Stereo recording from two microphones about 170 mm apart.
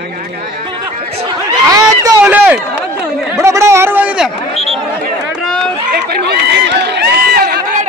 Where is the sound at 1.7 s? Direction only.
20° right (ahead or behind).